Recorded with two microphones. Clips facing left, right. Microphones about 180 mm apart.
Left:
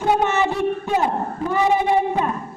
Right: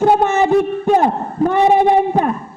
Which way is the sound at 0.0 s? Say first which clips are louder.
Right 6 dB; 50° right (ahead or behind).